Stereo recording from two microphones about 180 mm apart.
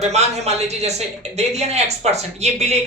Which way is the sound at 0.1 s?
35° right (ahead or behind).